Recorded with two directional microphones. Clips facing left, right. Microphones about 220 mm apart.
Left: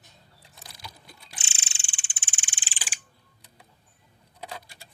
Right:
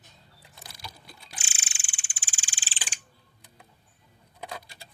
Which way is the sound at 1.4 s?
25° left (ahead or behind).